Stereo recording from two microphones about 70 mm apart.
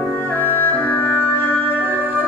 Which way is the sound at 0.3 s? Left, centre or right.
Left.